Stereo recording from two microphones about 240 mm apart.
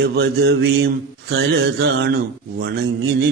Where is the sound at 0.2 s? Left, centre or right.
Right.